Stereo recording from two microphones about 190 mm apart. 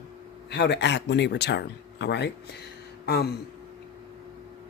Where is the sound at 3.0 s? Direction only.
55° left (ahead or behind).